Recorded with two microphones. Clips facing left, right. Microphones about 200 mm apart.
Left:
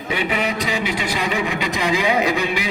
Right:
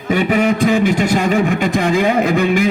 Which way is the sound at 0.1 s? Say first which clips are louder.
Right 8 dB; 45° right (ahead or behind).